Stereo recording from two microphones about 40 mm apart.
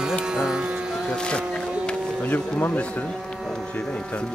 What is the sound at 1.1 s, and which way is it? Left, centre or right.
Vehicle, left.